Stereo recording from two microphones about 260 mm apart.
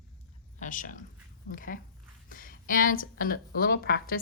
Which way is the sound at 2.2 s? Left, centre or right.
Left.